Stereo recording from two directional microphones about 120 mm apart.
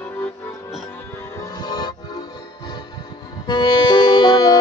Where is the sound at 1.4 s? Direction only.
35° left (ahead or behind).